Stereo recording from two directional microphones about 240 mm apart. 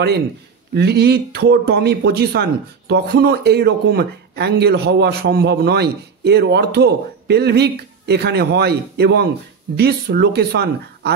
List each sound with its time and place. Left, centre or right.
0.7 s speech: right